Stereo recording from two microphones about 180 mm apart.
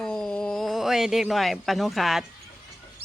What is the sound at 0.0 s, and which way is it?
A man's voice, 5° left (ahead or behind).